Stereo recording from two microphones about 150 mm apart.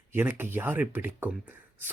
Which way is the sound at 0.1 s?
15° right (ahead or behind).